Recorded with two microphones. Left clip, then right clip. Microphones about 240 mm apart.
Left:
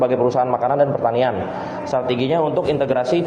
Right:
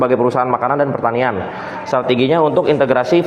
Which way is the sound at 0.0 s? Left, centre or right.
Right.